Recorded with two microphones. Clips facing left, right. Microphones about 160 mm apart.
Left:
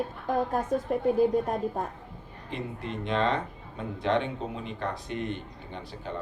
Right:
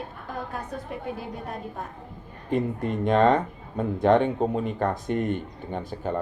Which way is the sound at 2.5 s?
45° right (ahead or behind).